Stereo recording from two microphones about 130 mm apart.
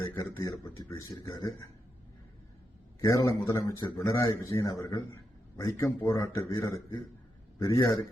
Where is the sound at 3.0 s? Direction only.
25° left (ahead or behind).